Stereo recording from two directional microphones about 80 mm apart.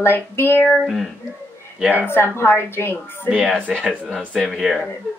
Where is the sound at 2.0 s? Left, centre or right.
Left.